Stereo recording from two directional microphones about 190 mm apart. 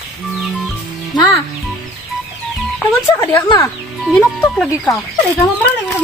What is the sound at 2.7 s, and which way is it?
Telephone dialing, 10° left (ahead or behind).